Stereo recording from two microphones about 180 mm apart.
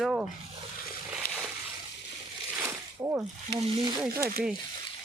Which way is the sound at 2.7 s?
15° right (ahead or behind).